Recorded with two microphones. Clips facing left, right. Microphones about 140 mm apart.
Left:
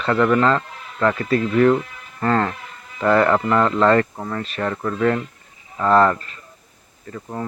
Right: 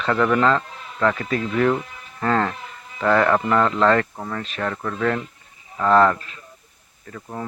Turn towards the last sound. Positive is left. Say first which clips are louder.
# left 3 dB
turn(degrees=5)  # may be behind; listen again after turning